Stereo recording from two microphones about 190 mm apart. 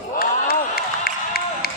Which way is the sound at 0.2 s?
55° left (ahead or behind).